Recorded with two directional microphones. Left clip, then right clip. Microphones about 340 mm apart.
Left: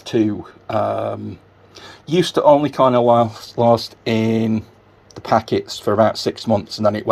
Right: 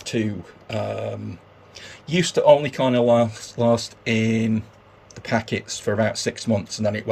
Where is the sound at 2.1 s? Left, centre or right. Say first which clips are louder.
Left 3 dB; left.